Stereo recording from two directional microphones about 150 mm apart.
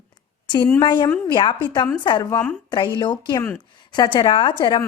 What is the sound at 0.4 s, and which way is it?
A woman's voice, 30° left (ahead or behind).